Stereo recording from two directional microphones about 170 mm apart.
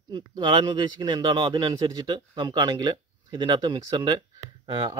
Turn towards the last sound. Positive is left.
turn(degrees=-25)  # may be behind; listen again after turning